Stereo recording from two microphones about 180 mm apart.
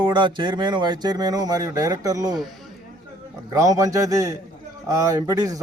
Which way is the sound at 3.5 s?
20° right (ahead or behind).